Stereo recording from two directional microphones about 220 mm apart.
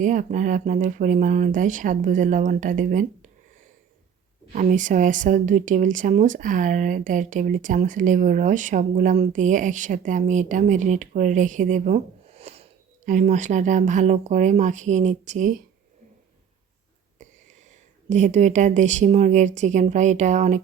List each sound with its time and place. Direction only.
0.0 s speech: 35° right (ahead or behind)
4.5 s speech: 35° right (ahead or behind)
18.1 s speech: 30° right (ahead or behind)